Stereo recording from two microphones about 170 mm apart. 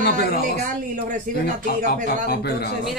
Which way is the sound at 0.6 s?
50° right (ahead or behind).